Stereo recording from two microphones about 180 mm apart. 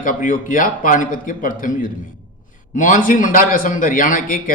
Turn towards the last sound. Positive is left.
turn(degrees=50)  # may be behind; listen again after turning